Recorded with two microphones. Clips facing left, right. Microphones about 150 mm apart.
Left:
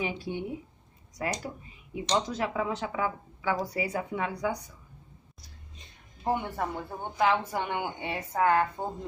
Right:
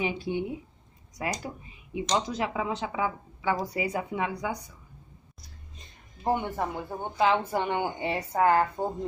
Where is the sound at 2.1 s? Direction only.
15° right (ahead or behind).